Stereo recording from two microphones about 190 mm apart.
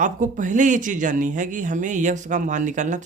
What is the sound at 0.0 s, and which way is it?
Speech, 40° right (ahead or behind).